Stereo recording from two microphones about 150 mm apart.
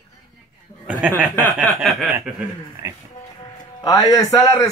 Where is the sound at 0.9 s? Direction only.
10° right (ahead or behind).